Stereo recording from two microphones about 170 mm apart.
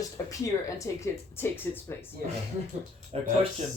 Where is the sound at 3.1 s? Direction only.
40° right (ahead or behind).